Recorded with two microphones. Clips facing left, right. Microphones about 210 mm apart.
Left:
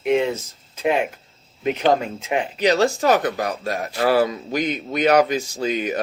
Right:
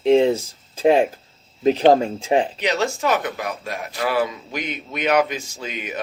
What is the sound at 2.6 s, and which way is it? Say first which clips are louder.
Speech: left 4 dB; 35° left (ahead or behind).